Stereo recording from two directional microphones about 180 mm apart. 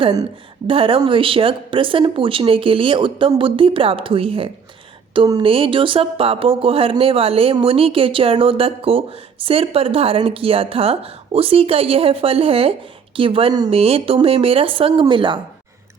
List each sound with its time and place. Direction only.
0.0 s speech: 20° right (ahead or behind)